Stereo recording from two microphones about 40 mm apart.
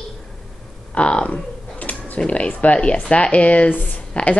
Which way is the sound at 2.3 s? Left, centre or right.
Left.